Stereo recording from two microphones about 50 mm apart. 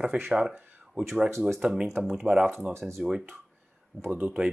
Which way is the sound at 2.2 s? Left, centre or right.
Centre.